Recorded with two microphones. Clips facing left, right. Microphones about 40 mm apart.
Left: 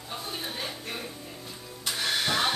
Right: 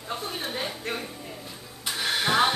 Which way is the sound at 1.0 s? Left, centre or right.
Centre.